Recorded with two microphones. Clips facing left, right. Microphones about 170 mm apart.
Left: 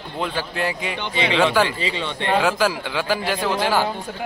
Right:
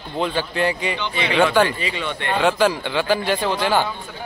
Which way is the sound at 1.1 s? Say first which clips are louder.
Left 1 dB; 25° left (ahead or behind).